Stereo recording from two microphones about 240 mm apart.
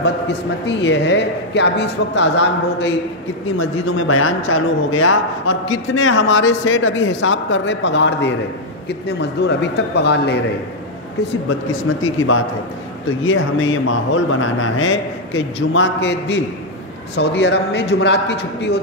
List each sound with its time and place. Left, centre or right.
0.7 s a man's voice: left
4.1 s a man's voice: left
12.0 s a man's voice: left